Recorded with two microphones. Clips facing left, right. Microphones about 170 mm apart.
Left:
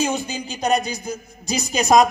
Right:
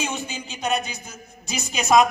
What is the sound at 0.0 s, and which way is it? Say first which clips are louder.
A man's voice: left 6 dB; 35° left (ahead or behind).